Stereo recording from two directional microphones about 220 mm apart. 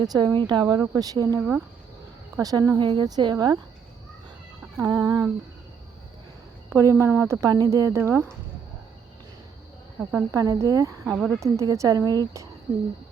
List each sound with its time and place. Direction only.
0.0 s speech: 15° right (ahead or behind)
4.6 s speech: 15° right (ahead or behind)
6.7 s speech: 10° right (ahead or behind)
10.0 s speech: 5° right (ahead or behind)
11.0 s speech: 5° right (ahead or behind)